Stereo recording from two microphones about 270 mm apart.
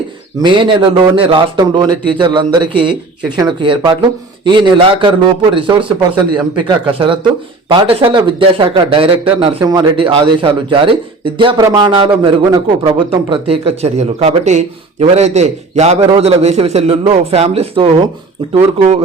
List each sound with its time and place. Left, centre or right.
0.4 s a man's voice: centre